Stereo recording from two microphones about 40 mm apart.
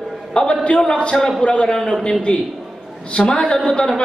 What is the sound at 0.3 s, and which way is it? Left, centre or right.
A man's voice, left.